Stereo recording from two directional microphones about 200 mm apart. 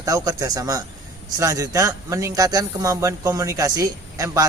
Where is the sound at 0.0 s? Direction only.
15° right (ahead or behind).